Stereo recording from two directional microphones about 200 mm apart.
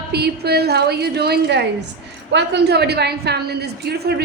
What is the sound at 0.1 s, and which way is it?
A woman's voice, 55° right (ahead or behind).